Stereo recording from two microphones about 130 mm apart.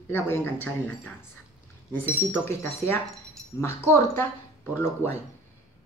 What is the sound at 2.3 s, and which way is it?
Speech, 20° left (ahead or behind).